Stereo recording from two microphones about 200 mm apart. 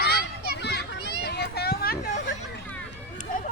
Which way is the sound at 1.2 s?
55° left (ahead or behind).